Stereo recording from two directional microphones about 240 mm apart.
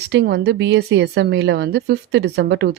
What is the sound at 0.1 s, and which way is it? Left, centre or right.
A woman's voice, right.